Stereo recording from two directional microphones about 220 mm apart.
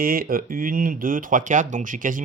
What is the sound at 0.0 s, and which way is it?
Speech, 40° right (ahead or behind).